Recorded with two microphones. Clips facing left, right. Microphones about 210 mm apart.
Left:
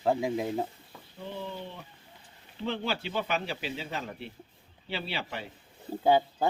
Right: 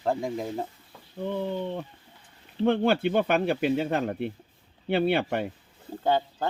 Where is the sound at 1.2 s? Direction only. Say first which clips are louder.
Right 9 dB; 55° right (ahead or behind).